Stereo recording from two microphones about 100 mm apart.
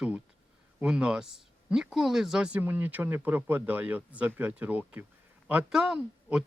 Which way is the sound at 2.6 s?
20° right (ahead or behind).